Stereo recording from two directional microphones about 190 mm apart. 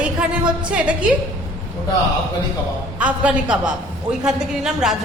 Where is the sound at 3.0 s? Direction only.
5° right (ahead or behind).